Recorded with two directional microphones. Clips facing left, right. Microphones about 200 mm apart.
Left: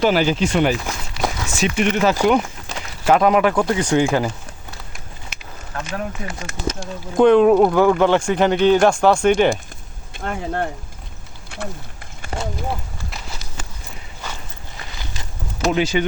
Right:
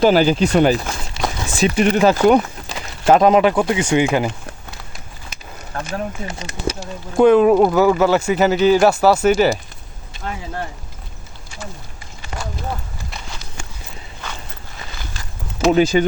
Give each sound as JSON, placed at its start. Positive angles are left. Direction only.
{"t": 0.0, "sound": "speech", "side_deg": -35}
{"t": 1.2, "sound": "a sound", "side_deg": -25}
{"t": 1.5, "sound": "speech", "side_deg": -35}
{"t": 5.7, "sound": "speech", "side_deg": -40}
{"t": 6.2, "sound": "speech", "side_deg": -20}
{"t": 6.7, "sound": "speech", "side_deg": -5}
{"t": 10.2, "sound": "speech", "side_deg": 55}
{"t": 11.5, "sound": "a sound", "side_deg": 60}
{"t": 12.3, "sound": "clip-clop", "side_deg": 35}
{"t": 13.1, "sound": "a sound", "side_deg": 0}
{"t": 15.7, "sound": "speech", "side_deg": -40}